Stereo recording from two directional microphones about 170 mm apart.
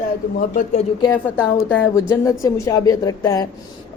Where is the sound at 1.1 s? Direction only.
10° left (ahead or behind).